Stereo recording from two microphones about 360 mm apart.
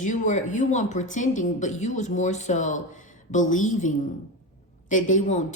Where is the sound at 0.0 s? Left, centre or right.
Left.